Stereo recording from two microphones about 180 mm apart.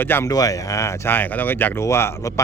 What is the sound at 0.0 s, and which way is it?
Speech, 15° left (ahead or behind).